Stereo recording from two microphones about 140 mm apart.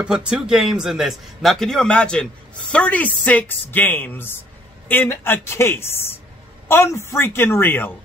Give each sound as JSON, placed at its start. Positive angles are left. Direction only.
{"t": 0.0, "sound": "a man's voice", "side_deg": -5}